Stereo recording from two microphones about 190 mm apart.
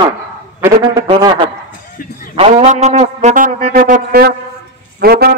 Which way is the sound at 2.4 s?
35° right (ahead or behind).